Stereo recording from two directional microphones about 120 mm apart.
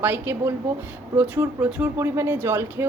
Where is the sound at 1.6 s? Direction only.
15° right (ahead or behind).